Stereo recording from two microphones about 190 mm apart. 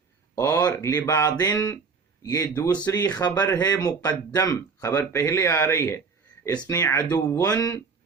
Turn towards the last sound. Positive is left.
turn(degrees=20)  # may be behind; listen again after turning